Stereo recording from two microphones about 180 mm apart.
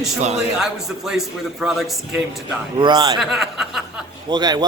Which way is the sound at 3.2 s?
Centre (ahead or behind).